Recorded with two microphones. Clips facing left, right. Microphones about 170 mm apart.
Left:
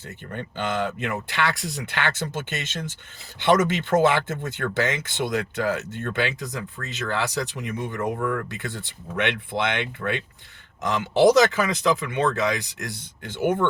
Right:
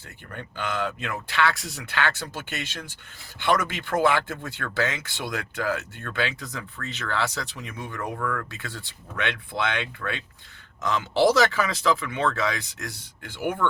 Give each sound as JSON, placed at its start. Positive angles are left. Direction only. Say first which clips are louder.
{"t": 0.3, "sound": "speech", "louder": "left 3 dB", "side_deg": 20}